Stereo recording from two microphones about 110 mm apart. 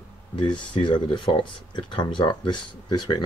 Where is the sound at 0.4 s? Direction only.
45° left (ahead or behind).